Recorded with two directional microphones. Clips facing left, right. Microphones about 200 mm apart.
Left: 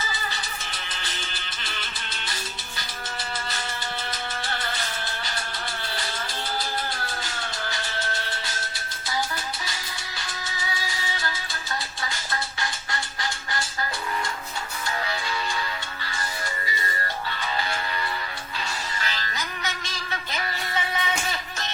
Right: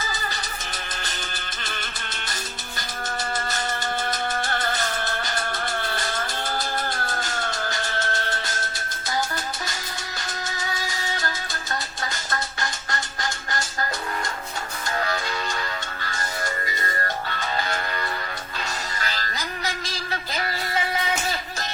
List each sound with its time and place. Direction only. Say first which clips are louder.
4.1 s music: right 5 dB; 45° right (ahead or behind)
5.8 s vehicle: right 4 dB; 50° right (ahead or behind)
7.1 s music: right 5 dB; 50° right (ahead or behind)
10.6 s music: even; 45° right (ahead or behind)
14.9 s music: right 5 dB; 45° right (ahead or behind)
16.8 s music: right 3 dB; 50° right (ahead or behind)